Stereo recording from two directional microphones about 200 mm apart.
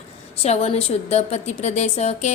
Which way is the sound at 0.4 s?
30° left (ahead or behind).